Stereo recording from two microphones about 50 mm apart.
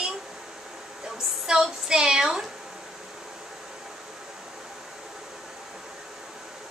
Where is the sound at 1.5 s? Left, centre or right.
Centre.